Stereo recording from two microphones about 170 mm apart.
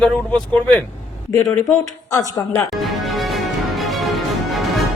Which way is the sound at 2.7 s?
Centre (ahead or behind).